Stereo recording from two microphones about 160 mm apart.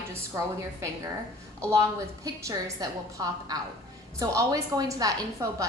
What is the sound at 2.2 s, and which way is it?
A woman's voice, 20° right (ahead or behind).